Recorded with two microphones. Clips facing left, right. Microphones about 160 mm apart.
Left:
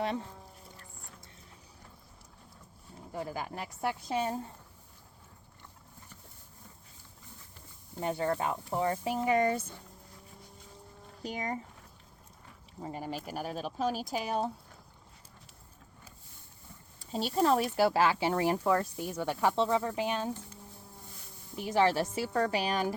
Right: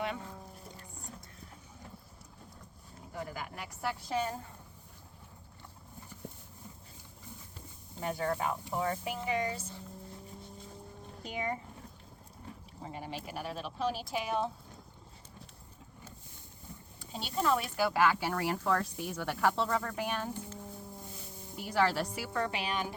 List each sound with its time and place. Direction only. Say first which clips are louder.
3.2 s speech: left 4 dB; 30° left (ahead or behind)
7.9 s speech: left 3 dB; 25° left (ahead or behind)
9.1 s speech: left 7 dB; 45° left (ahead or behind)
11.2 s speech: left 1 dB; 40° left (ahead or behind)
12.9 s speech: left 3 dB; 45° left (ahead or behind)
17.1 s speech: left 4 dB; 40° left (ahead or behind); by 20.3 s 20° left (ahead or behind)
21.7 s speech: left 3 dB; 20° left (ahead or behind)
22.3 s speech: left 5 dB; 40° left (ahead or behind)